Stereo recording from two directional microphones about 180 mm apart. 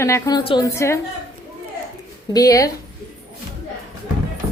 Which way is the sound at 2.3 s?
20° left (ahead or behind).